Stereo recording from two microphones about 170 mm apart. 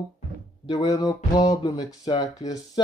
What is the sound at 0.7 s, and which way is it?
Speech, 25° left (ahead or behind).